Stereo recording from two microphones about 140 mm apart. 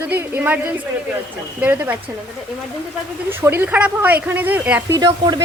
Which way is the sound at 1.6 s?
10° right (ahead or behind).